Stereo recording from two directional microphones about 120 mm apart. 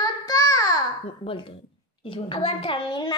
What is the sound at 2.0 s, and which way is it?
A child's voice, 45° left (ahead or behind).